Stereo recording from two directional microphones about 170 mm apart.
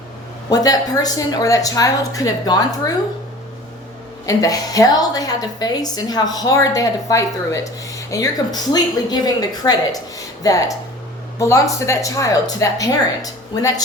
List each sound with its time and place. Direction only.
0.5 s a woman's voice: 20° left (ahead or behind)
4.3 s a woman's voice: 20° left (ahead or behind)